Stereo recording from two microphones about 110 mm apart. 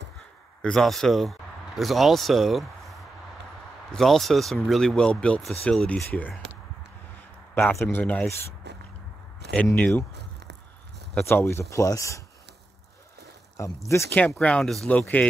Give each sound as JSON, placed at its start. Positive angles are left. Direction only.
{"t": 0.6, "sound": "speech", "side_deg": 5}
{"t": 7.8, "sound": "speech", "side_deg": 15}
{"t": 9.8, "sound": "speech", "side_deg": 15}
{"t": 11.2, "sound": "speech", "side_deg": 25}
{"t": 13.6, "sound": "speech", "side_deg": 25}
{"t": 14.4, "sound": "speech", "side_deg": 5}
{"t": 15.0, "sound": "speech", "side_deg": 15}